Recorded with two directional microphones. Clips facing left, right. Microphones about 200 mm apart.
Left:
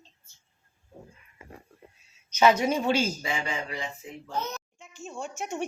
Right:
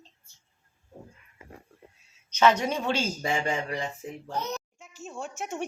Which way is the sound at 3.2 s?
45° right (ahead or behind).